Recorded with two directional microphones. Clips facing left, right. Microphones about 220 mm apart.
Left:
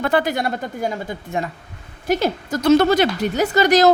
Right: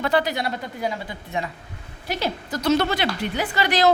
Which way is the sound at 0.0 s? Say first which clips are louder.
Left 3 dB; 50° left (ahead or behind).